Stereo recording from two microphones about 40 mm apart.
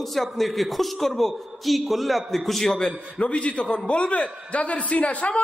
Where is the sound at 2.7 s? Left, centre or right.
Centre.